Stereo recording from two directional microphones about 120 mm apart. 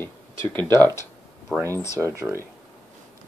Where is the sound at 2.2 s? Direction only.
20° right (ahead or behind).